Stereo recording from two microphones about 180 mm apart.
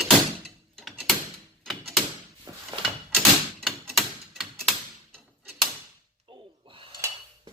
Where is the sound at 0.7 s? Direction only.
Centre (ahead or behind).